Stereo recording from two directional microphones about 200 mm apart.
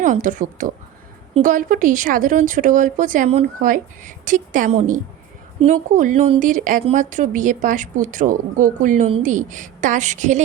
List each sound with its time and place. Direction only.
0.0 s speech: 40° right (ahead or behind)